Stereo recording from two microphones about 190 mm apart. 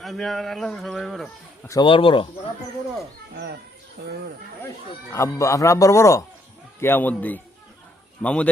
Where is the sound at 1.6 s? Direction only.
15° left (ahead or behind).